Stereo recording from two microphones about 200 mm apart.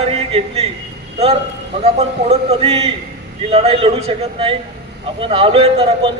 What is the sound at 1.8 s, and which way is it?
A man's voice, 30° right (ahead or behind).